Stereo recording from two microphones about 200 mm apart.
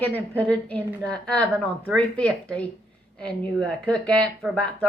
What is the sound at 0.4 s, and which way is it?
A woman's voice, 5° left (ahead or behind).